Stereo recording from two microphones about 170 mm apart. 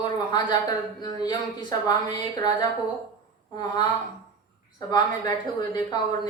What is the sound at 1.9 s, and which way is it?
Speech, 25° left (ahead or behind).